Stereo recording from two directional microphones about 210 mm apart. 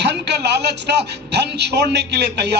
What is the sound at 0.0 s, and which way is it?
A man's voice, 55° right (ahead or behind).